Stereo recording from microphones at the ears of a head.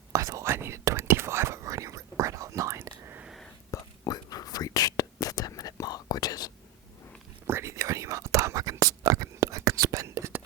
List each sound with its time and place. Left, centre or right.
0.1 s whispering: right
3.7 s whispering: left
7.4 s whispering: right